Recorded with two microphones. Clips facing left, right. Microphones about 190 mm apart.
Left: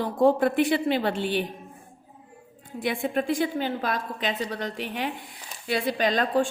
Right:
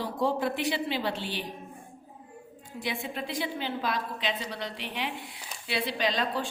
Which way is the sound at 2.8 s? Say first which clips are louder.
Left 8 dB; 50° left (ahead or behind).